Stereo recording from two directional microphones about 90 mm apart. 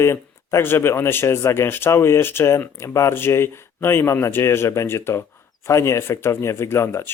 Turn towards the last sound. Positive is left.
turn(degrees=30)  # may be behind; listen again after turning